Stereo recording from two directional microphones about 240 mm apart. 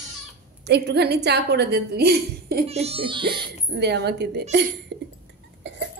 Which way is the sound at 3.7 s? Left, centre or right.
Right.